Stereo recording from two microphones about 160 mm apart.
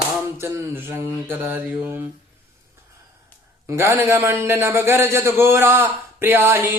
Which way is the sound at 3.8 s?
15° right (ahead or behind).